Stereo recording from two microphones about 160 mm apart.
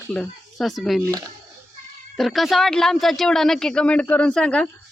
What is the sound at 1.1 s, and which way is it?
Speech, 20° right (ahead or behind).